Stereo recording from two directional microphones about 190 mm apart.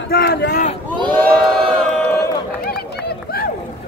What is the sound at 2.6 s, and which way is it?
Run, 55° left (ahead or behind).